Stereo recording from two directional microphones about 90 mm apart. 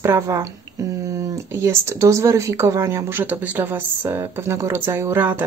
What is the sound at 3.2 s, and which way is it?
Speech, 20° right (ahead or behind).